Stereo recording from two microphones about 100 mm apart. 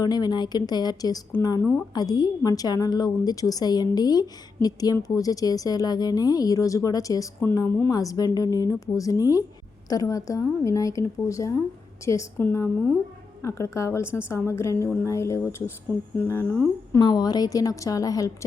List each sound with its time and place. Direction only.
0.0 s a woman's voice: 40° left (ahead or behind)
12.4 s speech: 20° left (ahead or behind)
17.0 s a woman's voice: 40° left (ahead or behind)